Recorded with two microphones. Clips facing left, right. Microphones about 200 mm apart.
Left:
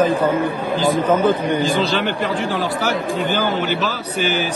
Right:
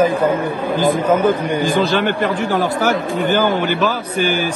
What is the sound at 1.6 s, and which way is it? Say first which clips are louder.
Speech: right 3 dB; 50° right (ahead or behind).